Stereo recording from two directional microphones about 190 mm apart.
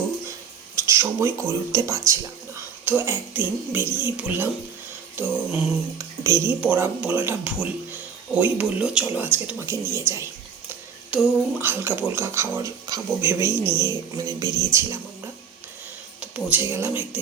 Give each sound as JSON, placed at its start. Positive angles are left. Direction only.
{"t": 0.9, "sound": "speech", "side_deg": -15}
{"t": 11.1, "sound": "speech", "side_deg": -10}
{"t": 16.2, "sound": "speech", "side_deg": -5}